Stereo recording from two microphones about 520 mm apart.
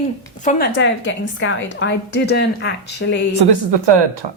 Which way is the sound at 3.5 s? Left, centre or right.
Right.